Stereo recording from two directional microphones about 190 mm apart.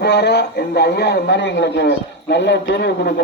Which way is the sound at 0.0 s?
60° left (ahead or behind).